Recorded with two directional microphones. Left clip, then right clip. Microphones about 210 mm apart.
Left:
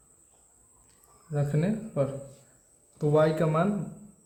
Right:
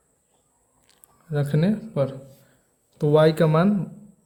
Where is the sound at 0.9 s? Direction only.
40° right (ahead or behind).